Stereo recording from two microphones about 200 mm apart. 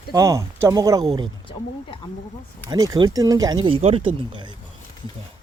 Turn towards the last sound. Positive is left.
turn(degrees=-25)  # may be behind; listen again after turning